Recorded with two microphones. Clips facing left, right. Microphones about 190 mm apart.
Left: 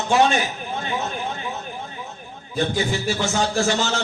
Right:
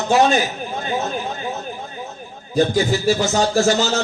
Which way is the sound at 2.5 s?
40° right (ahead or behind).